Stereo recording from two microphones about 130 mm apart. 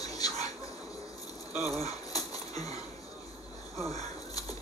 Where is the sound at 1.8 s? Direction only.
30° left (ahead or behind).